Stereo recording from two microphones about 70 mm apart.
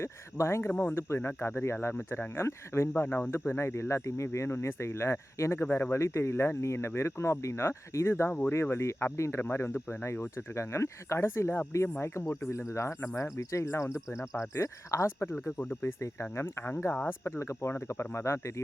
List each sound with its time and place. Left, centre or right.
0.0 s speech: left
0.7 s speech: left
0.9 s speech: left
2.9 s speech: left
5.6 s speech: left
5.9 s speech: left
8.3 s speech: left
8.6 s speech: left
9.4 s speech: left
16.9 s speech: left
17.2 s speech: left